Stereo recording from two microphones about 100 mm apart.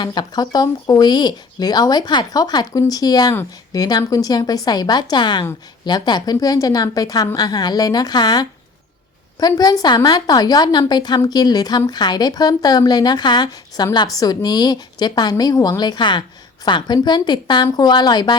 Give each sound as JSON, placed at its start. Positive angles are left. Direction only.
{"t": 0.0, "sound": "a woman's voice", "side_deg": 45}